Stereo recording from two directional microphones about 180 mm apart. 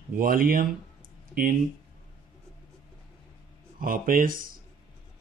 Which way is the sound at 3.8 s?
50° right (ahead or behind).